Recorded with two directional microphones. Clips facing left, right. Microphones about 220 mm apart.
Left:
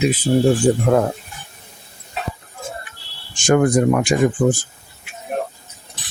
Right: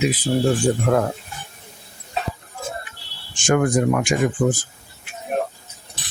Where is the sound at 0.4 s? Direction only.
15° left (ahead or behind).